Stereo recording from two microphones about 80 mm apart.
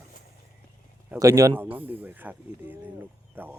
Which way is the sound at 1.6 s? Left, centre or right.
Right.